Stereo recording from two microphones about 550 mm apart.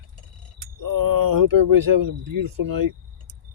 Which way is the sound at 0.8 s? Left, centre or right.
Right.